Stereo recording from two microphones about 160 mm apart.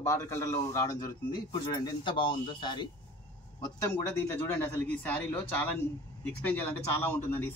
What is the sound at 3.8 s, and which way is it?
Speech, 10° left (ahead or behind).